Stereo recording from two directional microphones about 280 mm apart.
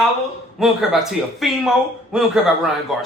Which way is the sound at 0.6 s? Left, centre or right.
Centre.